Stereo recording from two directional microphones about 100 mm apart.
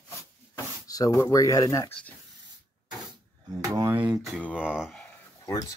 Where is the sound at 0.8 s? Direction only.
35° left (ahead or behind).